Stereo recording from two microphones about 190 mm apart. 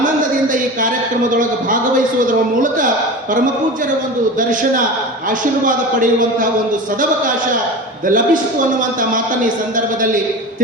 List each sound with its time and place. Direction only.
1.3 s a man's voice: 45° right (ahead or behind)
4.4 s a man's voice: 45° right (ahead or behind)
8.0 s a man's voice: 45° right (ahead or behind)